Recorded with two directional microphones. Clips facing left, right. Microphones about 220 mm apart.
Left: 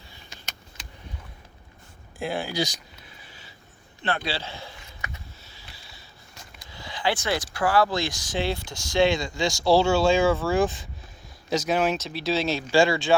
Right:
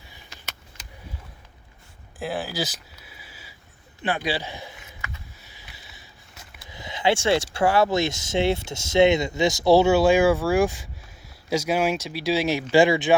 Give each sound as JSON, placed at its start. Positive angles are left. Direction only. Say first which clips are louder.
{"t": 2.1, "sound": "a sound", "louder": "left 1 dB", "side_deg": -5}
{"t": 4.0, "sound": "speech", "louder": "right 3 dB", "side_deg": -15}
{"t": 5.4, "sound": "sniff", "louder": "even", "side_deg": -15}
{"t": 6.7, "sound": "speech", "louder": "right 4 dB", "side_deg": -20}